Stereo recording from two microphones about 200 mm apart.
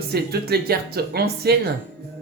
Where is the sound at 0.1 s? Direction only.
50° right (ahead or behind).